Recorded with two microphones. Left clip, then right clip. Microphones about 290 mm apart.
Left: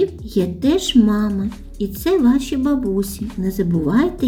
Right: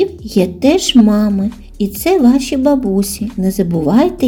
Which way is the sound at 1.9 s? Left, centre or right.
Centre.